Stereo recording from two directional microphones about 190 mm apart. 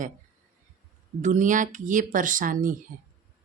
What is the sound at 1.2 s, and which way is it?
Speech, 40° right (ahead or behind).